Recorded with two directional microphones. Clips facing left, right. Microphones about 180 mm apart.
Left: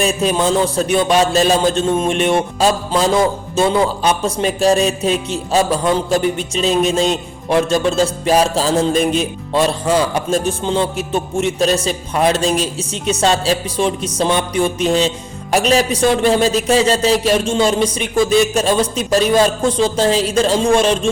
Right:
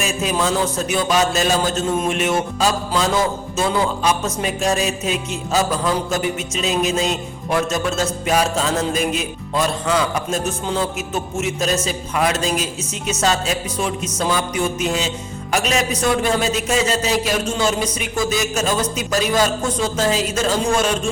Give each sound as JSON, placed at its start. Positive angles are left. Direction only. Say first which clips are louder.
{"t": 0.0, "sound": "music", "louder": "left 5 dB", "side_deg": 35}